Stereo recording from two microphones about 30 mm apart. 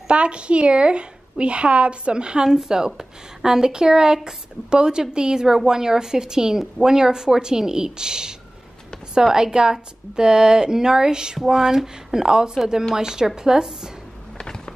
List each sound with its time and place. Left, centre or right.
0.1 s a woman's voice: right
2.4 s a woman's voice: right